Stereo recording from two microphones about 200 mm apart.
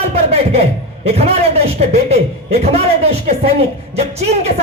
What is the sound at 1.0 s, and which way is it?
Speech, 30° right (ahead or behind).